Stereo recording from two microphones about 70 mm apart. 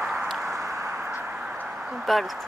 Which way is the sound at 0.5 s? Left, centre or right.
Right.